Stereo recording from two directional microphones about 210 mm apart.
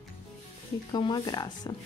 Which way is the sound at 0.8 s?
20° left (ahead or behind).